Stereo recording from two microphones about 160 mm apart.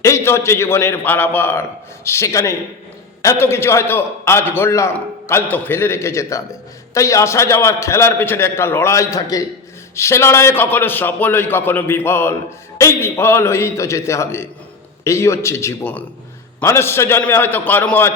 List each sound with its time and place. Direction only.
0.0 s a man's voice: 15° left (ahead or behind)